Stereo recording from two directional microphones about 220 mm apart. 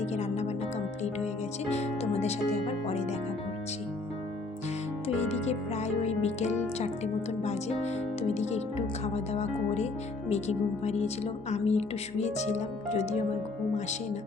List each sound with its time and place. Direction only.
0.0 s music: 30° left (ahead or behind)
1.7 s music: 30° left (ahead or behind)
5.0 s music: 30° left (ahead or behind)
6.7 s speech: 30° left (ahead or behind)